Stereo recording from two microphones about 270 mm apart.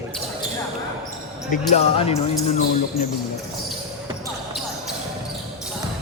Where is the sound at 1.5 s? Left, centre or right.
Left.